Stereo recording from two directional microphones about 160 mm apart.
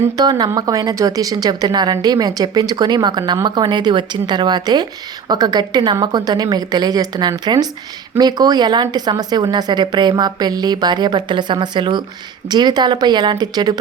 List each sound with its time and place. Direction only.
0.0 s speech: 25° right (ahead or behind)